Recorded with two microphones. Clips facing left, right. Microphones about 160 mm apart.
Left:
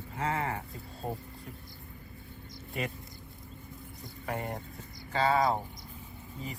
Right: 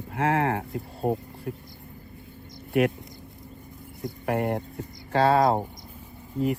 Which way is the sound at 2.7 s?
70° right (ahead or behind).